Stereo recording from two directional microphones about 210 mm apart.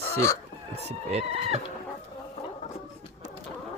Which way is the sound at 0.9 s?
30° right (ahead or behind).